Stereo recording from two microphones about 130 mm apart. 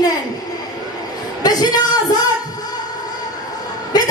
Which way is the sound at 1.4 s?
30° left (ahead or behind).